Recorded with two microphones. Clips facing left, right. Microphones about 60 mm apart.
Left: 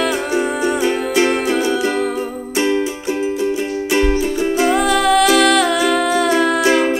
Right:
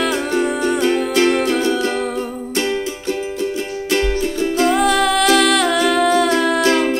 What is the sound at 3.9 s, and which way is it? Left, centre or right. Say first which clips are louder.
Music: left 2 dB; centre.